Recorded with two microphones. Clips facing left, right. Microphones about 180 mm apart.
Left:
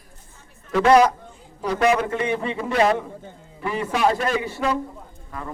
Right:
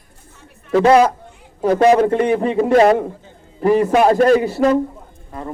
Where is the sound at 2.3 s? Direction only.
55° right (ahead or behind).